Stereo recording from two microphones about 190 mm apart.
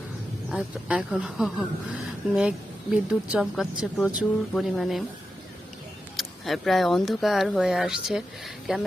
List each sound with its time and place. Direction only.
0.5 s a woman's voice: 5° right (ahead or behind)
6.1 s a woman's voice: centre (ahead or behind)